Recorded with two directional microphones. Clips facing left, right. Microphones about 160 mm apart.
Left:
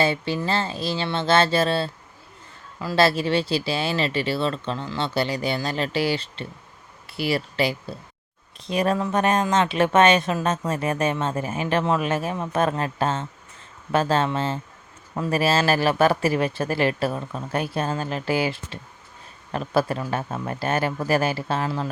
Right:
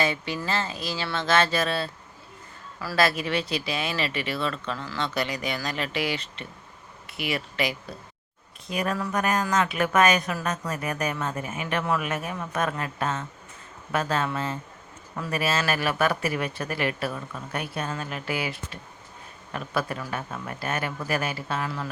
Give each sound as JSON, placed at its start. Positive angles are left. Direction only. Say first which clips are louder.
{"t": 0.0, "sound": "a woman's voice", "louder": "left 4 dB", "side_deg": 30}